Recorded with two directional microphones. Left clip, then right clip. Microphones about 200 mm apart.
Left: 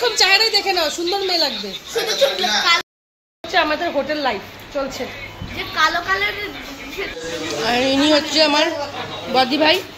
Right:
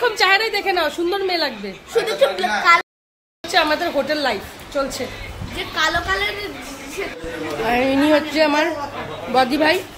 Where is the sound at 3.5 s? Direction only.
5° right (ahead or behind).